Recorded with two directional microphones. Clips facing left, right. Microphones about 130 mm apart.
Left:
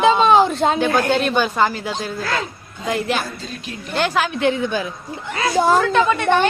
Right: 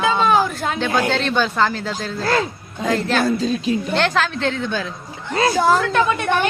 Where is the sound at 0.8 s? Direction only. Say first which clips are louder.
Left 2 dB; 10° left (ahead or behind).